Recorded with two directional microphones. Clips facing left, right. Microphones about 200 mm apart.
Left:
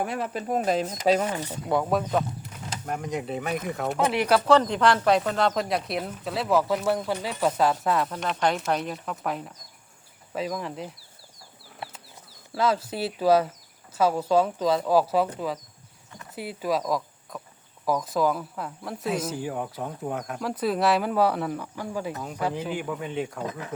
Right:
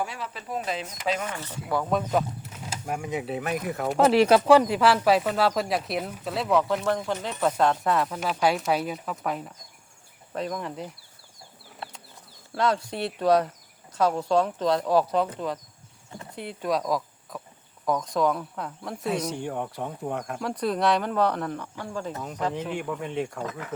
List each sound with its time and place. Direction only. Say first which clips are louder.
0.0 s speech: left 5 dB; 55° left (ahead or behind); by 1.4 s 35° left (ahead or behind)
1.7 s speech: left 3 dB; 25° left (ahead or behind)
2.0 s speech: right 1 dB; 5° right (ahead or behind)
3.9 s speech: right 7 dB; 35° right (ahead or behind)
4.3 s speech: right 2 dB; 10° right (ahead or behind)
12.5 s speech: left 1 dB; 5° left (ahead or behind)
23.5 s speech: left 1 dB; 15° left (ahead or behind)